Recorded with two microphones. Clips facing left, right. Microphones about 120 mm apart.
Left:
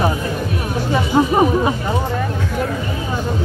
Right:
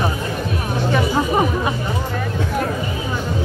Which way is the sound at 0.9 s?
25° left (ahead or behind).